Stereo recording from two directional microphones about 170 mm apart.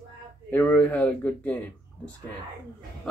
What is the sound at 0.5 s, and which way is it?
Speech, 10° left (ahead or behind).